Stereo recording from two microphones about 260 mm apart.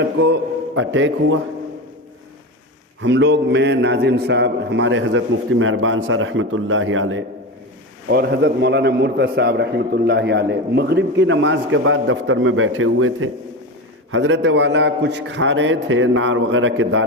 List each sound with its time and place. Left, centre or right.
0.8 s a man's voice: right
3.0 s a man's voice: right